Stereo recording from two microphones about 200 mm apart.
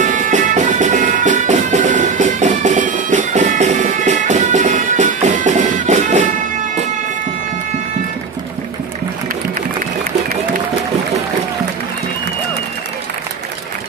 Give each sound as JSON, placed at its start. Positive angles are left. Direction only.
{"t": 0.0, "sound": "music", "side_deg": -40}